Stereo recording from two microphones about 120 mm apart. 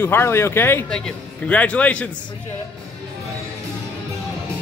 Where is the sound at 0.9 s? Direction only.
5° left (ahead or behind).